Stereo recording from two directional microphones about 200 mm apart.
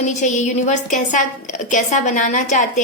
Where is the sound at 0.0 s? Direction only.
35° left (ahead or behind).